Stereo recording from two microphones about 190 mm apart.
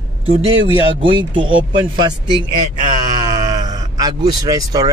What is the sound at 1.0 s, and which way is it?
Speech, 25° right (ahead or behind).